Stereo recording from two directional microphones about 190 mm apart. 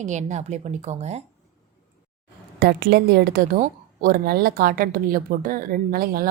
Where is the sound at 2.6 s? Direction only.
55° right (ahead or behind).